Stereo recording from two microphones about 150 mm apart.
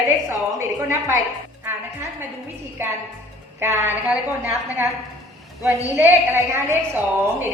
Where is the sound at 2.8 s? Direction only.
15° right (ahead or behind).